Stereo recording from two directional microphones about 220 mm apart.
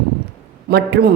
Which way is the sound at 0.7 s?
45° right (ahead or behind).